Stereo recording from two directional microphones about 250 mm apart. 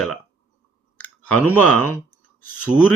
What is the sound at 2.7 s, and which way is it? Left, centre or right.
Speech, centre.